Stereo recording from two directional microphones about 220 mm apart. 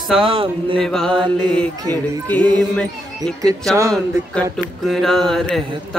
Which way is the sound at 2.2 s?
5° left (ahead or behind).